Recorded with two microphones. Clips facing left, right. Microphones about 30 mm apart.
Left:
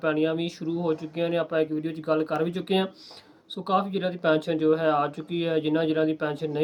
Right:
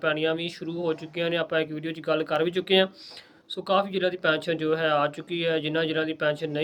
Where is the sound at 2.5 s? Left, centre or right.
Right.